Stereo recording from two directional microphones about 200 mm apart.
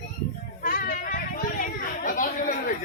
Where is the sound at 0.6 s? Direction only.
45° left (ahead or behind).